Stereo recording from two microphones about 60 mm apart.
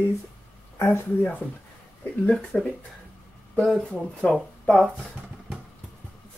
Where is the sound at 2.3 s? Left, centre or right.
Left.